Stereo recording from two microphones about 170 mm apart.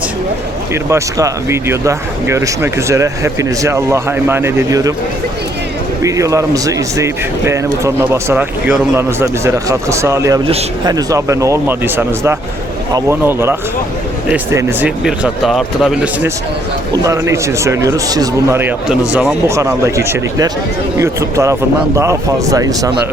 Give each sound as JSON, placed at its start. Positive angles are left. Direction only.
{"t": 0.7, "sound": "speech", "side_deg": -15}
{"t": 6.0, "sound": "speech", "side_deg": -20}
{"t": 16.9, "sound": "speech", "side_deg": -20}
{"t": 18.9, "sound": "speech", "side_deg": -5}
{"t": 19.5, "sound": "speech", "side_deg": -15}